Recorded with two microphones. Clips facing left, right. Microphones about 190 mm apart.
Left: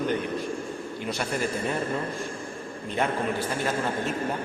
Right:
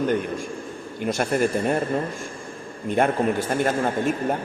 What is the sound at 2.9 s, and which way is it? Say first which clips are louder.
A man's voice: right 6 dB; 50° right (ahead or behind).